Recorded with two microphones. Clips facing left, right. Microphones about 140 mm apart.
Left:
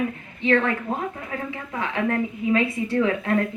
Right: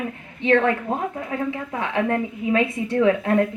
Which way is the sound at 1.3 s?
25° right (ahead or behind).